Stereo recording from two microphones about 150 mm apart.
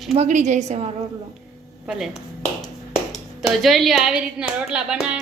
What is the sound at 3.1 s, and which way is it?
Speech, centre (ahead or behind).